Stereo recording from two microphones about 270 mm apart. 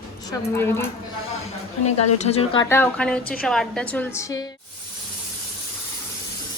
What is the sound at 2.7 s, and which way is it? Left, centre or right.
A woman's voice, centre.